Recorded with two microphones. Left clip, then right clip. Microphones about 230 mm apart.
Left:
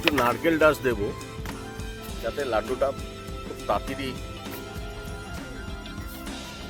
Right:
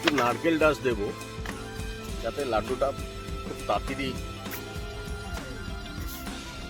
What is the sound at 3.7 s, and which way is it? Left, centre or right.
Speech, centre.